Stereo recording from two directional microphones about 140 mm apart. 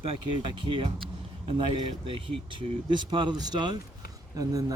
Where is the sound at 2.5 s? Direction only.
35° right (ahead or behind).